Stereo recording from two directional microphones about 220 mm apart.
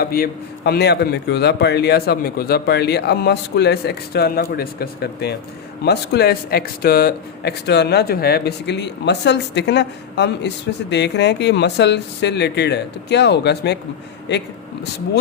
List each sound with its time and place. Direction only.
0.0 s speech: 45° left (ahead or behind)